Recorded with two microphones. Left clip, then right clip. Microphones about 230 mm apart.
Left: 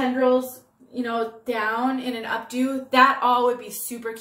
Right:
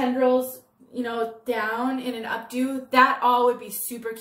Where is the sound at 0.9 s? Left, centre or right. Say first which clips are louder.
Left 1 dB; centre.